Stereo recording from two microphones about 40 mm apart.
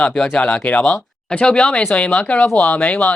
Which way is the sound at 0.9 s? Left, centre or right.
Left.